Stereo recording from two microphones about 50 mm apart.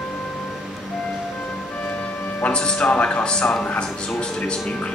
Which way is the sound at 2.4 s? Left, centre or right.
Centre.